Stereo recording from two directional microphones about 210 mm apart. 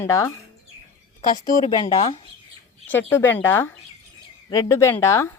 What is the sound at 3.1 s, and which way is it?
Speech, 10° left (ahead or behind).